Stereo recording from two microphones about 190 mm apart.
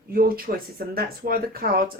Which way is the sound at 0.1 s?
50° right (ahead or behind).